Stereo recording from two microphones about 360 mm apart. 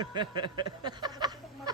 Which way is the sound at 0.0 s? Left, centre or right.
Centre.